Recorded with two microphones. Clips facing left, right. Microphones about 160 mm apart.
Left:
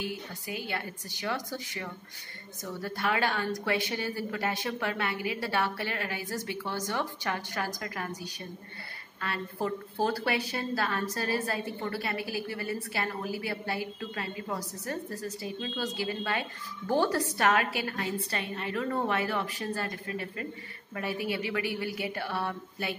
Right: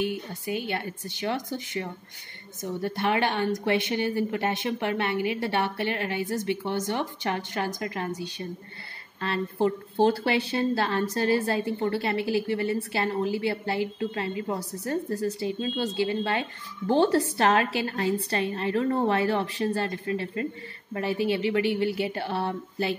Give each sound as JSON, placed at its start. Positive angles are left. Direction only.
{"t": 0.0, "sound": "a woman's voice", "side_deg": -25}